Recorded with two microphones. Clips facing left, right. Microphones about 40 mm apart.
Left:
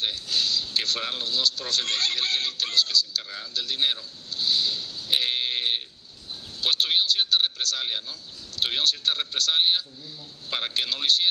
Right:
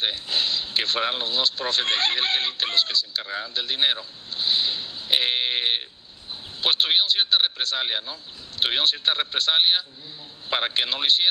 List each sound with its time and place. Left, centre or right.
0.0 s speech: right